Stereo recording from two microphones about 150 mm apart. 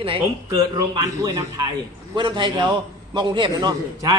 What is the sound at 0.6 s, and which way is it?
A man's voice, 25° right (ahead or behind).